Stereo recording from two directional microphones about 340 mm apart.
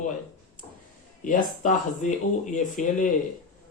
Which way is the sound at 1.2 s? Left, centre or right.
Left.